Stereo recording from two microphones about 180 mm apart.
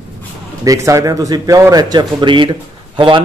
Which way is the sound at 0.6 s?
15° right (ahead or behind).